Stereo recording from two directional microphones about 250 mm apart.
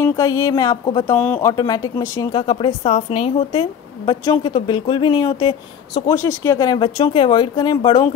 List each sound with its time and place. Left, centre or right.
0.0 s a woman's voice: centre